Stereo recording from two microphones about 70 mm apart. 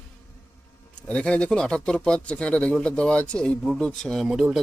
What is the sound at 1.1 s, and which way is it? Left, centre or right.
Speech, centre.